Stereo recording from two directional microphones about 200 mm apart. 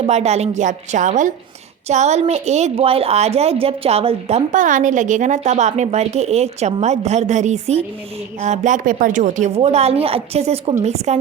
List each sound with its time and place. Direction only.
0.0 s a woman's voice: 35° right (ahead or behind)